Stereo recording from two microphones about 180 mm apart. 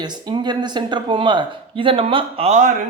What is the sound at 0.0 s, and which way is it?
Speech, 25° right (ahead or behind).